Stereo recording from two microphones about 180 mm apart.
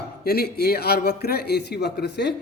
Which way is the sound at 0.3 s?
65° left (ahead or behind).